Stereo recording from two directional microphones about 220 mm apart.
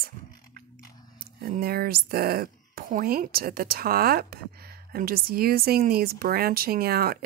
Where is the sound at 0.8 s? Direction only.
20° left (ahead or behind).